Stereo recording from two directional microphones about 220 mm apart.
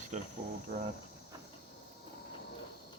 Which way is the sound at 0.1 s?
35° right (ahead or behind).